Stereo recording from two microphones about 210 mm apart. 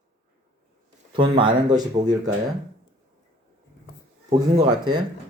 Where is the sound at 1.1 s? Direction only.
25° right (ahead or behind).